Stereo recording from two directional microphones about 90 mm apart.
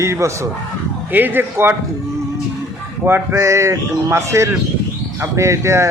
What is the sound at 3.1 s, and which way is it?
A man's voice, 30° right (ahead or behind).